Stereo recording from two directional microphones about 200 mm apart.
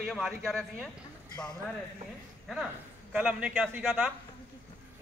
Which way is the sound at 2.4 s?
5° right (ahead or behind).